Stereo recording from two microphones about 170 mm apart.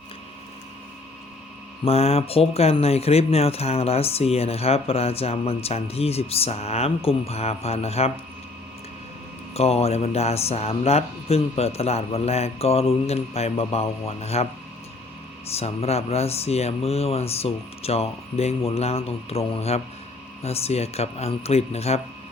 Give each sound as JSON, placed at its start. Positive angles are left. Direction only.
{"t": 1.8, "sound": "speech", "side_deg": 35}
{"t": 9.6, "sound": "speech", "side_deg": 35}
{"t": 15.4, "sound": "speech", "side_deg": 35}